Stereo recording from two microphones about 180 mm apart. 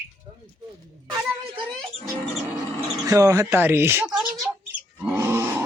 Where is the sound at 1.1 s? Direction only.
25° right (ahead or behind).